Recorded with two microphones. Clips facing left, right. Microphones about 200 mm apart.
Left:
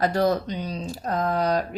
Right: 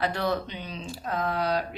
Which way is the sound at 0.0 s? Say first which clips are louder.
Left 6 dB; 40° left (ahead or behind).